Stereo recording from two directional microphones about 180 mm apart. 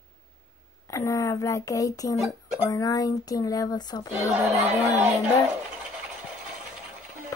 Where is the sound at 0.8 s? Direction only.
15° left (ahead or behind).